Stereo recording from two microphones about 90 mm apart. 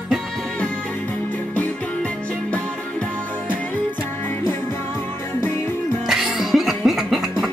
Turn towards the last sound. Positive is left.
turn(degrees=-5)  # may be behind; listen again after turning